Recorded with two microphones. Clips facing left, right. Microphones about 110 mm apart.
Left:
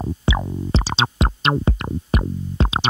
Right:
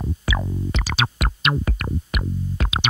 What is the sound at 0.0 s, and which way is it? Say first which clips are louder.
Music: left 4 dB; 25° left (ahead or behind).